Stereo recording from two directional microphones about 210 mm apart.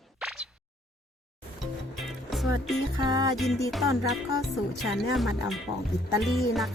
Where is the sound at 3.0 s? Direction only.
20° right (ahead or behind).